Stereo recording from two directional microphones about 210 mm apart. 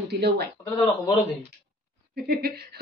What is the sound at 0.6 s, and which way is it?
Speech, 15° left (ahead or behind).